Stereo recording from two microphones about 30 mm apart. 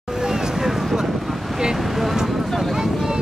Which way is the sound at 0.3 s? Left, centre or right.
Centre.